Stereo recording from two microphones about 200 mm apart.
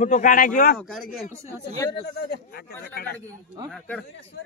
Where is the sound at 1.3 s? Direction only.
15° right (ahead or behind).